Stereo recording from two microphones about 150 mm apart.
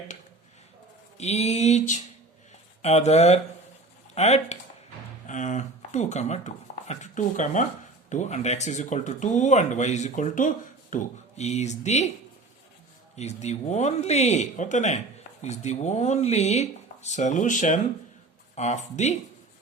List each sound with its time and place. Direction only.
1.2 s speech: 45° left (ahead or behind)
13.1 s speech: 50° left (ahead or behind)